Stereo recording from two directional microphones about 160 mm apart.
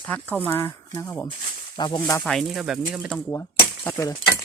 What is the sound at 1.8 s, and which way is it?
Speech, 30° left (ahead or behind).